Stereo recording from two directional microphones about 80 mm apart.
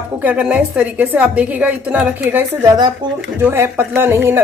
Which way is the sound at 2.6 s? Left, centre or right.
Right.